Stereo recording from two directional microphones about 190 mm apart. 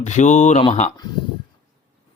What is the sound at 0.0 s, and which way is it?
Speech, 40° left (ahead or behind).